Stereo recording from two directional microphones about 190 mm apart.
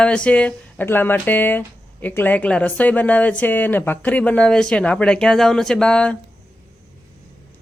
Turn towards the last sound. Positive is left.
turn(degrees=5)  # may be behind; listen again after turning